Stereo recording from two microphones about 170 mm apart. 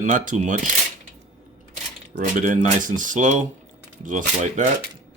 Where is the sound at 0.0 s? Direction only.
50° right (ahead or behind).